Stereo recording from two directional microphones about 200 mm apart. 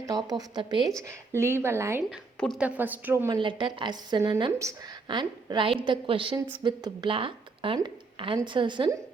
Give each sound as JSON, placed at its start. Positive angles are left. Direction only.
{"t": 0.0, "sound": "speech", "side_deg": -20}
{"t": 3.3, "sound": "speech", "side_deg": -25}